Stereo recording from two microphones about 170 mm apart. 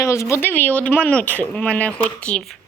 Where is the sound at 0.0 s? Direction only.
15° left (ahead or behind).